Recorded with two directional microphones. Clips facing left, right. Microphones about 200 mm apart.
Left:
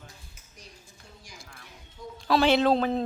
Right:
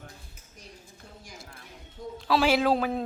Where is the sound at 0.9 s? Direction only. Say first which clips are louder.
Right 3 dB; 55° right (ahead or behind).